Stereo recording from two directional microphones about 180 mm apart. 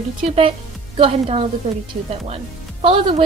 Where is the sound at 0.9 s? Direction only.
30° right (ahead or behind).